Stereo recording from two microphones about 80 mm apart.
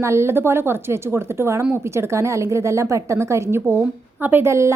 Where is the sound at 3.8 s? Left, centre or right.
Right.